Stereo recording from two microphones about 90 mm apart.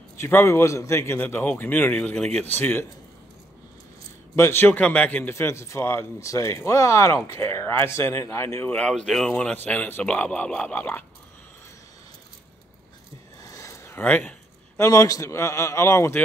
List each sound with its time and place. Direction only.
0.2 s a man's voice: 30° left (ahead or behind)
1.2 s a man's voice: 20° left (ahead or behind)
2.1 s speech: 10° left (ahead or behind)
2.4 s a man's voice: 20° left (ahead or behind)
4.4 s a man's voice: 25° left (ahead or behind)
5.3 s speech: 30° left (ahead or behind)
8.6 s speech: 10° left (ahead or behind)
13.4 s a sound: 35° left (ahead or behind)
14.0 s speech: 10° left (ahead or behind)
14.8 s speech: 40° left (ahead or behind)